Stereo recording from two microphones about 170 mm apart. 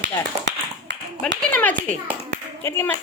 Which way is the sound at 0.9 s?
90° right.